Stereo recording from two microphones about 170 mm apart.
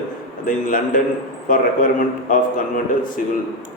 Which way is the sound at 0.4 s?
55° left (ahead or behind).